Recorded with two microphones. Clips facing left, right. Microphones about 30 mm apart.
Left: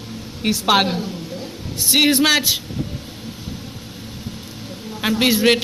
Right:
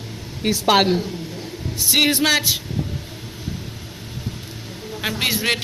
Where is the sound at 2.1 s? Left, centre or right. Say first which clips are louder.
Left 2 dB; left.